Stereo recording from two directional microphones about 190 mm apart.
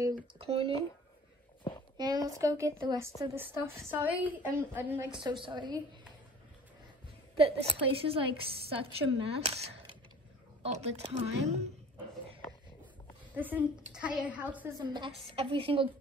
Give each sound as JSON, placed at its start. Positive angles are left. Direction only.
{"t": 0.0, "sound": "a woman's voice", "side_deg": -25}
{"t": 2.2, "sound": "a woman's voice", "side_deg": -15}
{"t": 5.1, "sound": "a woman's voice", "side_deg": -25}
{"t": 7.3, "sound": "a woman's voice", "side_deg": -30}
{"t": 13.3, "sound": "a woman's voice", "side_deg": -10}
{"t": 14.8, "sound": "a woman's voice", "side_deg": -25}